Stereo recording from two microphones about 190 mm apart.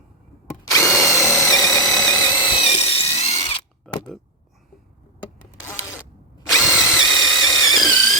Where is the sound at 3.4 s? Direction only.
30° left (ahead or behind).